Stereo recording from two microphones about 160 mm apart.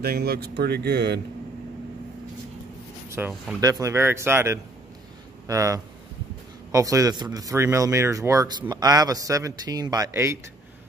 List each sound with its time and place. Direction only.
0.0 s speech: 75° right (ahead or behind); by 1.2 s 90° right
3.1 s a sound: 10° right (ahead or behind)
3.6 s speech: 20° right (ahead or behind)